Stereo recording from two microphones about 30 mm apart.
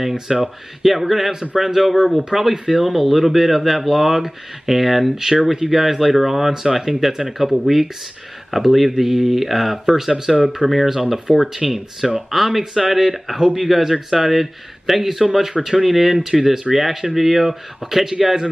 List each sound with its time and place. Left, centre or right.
0.1 s speech: right
0.8 s speech: centre
9.9 s speech: centre